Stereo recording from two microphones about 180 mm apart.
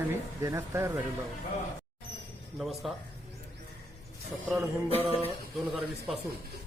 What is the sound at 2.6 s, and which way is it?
Speech, centre (ahead or behind).